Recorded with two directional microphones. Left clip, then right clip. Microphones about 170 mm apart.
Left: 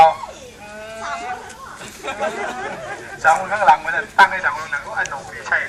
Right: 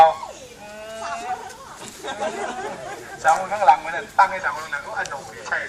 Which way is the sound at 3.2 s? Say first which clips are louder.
Left 2 dB; 10° right (ahead or behind).